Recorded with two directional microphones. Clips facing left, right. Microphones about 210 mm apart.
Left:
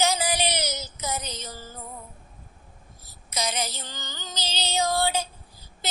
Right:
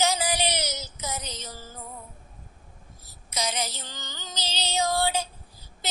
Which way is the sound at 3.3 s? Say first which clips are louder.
Left 1 dB; 55° left (ahead or behind).